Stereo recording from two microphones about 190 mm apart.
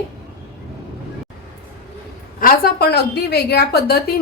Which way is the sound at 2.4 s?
50° left (ahead or behind).